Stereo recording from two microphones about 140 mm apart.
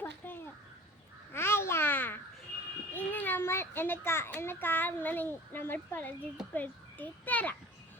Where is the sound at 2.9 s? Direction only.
15° left (ahead or behind).